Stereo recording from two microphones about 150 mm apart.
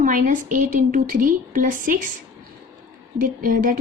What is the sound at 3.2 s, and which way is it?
Speech, 70° right (ahead or behind).